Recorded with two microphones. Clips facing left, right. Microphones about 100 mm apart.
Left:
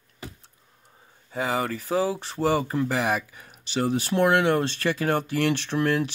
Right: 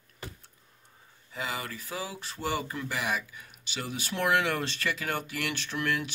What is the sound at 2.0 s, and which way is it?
Speech, 35° left (ahead or behind).